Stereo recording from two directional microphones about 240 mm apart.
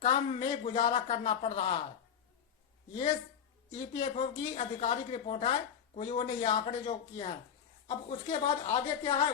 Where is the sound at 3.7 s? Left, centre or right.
Left.